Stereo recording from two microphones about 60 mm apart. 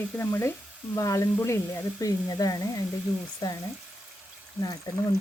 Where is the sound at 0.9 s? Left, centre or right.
Left.